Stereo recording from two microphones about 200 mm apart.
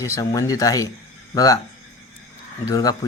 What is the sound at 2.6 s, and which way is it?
Speech, 20° left (ahead or behind).